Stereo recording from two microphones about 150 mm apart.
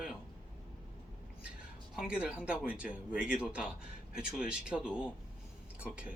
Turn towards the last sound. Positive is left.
turn(degrees=-10)  # may be behind; listen again after turning